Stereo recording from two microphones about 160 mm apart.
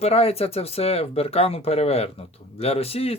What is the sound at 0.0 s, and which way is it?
Speech, 40° left (ahead or behind).